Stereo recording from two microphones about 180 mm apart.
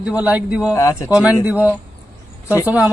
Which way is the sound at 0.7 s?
15° left (ahead or behind).